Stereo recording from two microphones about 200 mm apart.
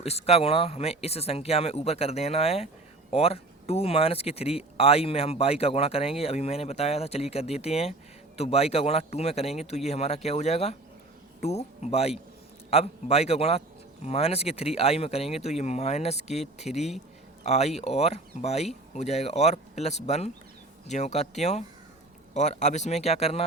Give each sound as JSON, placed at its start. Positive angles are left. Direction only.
{"t": 0.0, "sound": "speech", "side_deg": 30}